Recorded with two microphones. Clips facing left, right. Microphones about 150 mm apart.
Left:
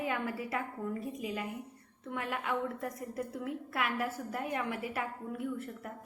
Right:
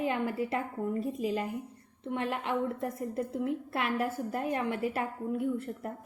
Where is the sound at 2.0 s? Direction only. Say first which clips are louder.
Right 4 dB; 25° right (ahead or behind).